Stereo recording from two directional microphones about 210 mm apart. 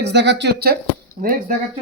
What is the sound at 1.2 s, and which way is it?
Speech, 40° right (ahead or behind).